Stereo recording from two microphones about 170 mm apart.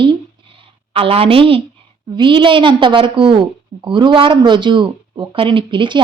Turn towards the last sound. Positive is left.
turn(degrees=-30)  # may be behind; listen again after turning